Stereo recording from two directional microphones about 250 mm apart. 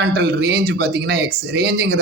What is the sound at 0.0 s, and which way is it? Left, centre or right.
Speech, right.